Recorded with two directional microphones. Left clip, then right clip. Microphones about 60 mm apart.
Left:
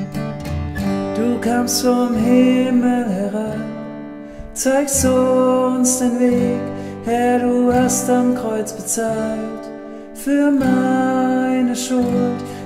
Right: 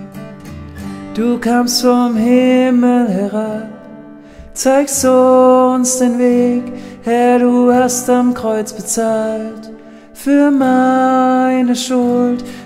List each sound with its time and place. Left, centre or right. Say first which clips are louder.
1.1 s music: right 6 dB; right
4.6 s music: right 5 dB; right
10.2 s music: right 5 dB; right